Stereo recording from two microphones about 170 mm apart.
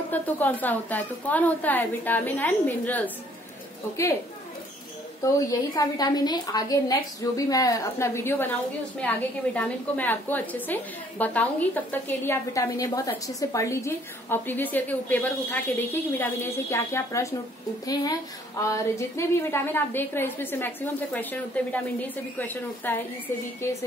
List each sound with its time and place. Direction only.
0.1 s a woman's voice: 10° left (ahead or behind)
5.2 s a woman's voice: 20° left (ahead or behind)
18.6 s a woman's voice: 15° left (ahead or behind)